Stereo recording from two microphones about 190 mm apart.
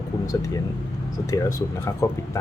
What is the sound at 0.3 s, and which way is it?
Speech, 15° left (ahead or behind).